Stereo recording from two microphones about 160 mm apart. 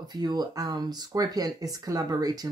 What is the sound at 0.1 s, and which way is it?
Speech, 25° right (ahead or behind).